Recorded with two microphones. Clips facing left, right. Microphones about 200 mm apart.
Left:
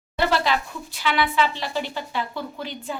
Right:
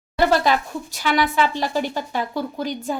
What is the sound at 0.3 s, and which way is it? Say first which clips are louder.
Speech: right 3 dB; 45° right (ahead or behind).